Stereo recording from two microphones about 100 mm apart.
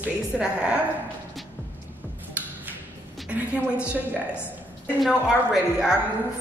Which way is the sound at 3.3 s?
10° right (ahead or behind).